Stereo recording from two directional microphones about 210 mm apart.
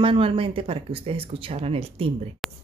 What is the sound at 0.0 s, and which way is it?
Speech, 25° right (ahead or behind).